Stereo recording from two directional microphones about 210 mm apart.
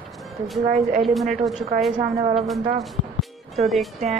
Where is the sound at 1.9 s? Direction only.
30° right (ahead or behind).